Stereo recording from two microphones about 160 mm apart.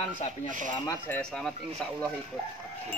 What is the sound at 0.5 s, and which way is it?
Music, 55° right (ahead or behind).